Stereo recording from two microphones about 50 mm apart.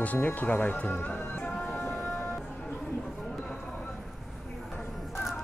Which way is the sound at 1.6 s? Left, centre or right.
Left.